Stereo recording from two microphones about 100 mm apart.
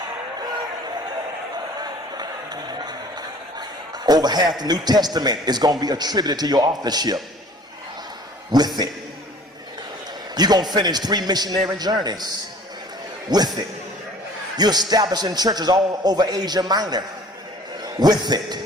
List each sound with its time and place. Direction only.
0.4 s a sound: 45° right (ahead or behind)
5.8 s a man's voice: 45° right (ahead or behind)
8.5 s a man's voice: 45° right (ahead or behind)
10.3 s a man's voice: 45° right (ahead or behind)
13.3 s a man's voice: 45° right (ahead or behind)
14.5 s a man's voice: 45° right (ahead or behind)